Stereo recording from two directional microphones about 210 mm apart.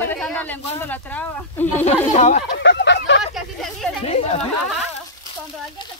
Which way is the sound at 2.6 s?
55° left (ahead or behind).